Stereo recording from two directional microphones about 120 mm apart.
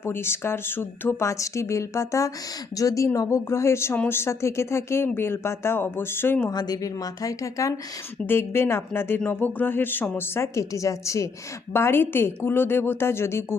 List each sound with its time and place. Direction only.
0.0 s speech: 20° left (ahead or behind)
6.5 s speech: 35° left (ahead or behind)